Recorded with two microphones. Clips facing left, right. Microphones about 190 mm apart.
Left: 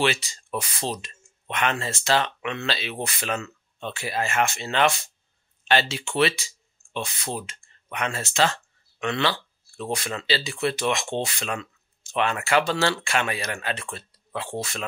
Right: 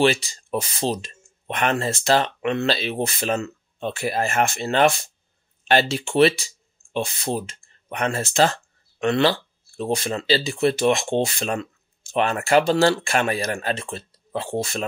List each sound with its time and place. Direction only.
0.0 s speech: 35° right (ahead or behind)
1.0 s speech: 40° right (ahead or behind)
2.9 s a man's voice: 25° right (ahead or behind)
3.2 s speech: 40° right (ahead or behind)
9.8 s a man's voice: 30° right (ahead or behind)